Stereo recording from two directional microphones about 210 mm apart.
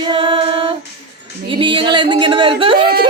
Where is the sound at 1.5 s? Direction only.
25° right (ahead or behind).